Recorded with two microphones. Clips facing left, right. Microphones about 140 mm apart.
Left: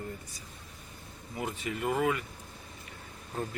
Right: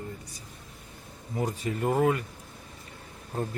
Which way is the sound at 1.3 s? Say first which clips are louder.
Right 5 dB; 40° right (ahead or behind).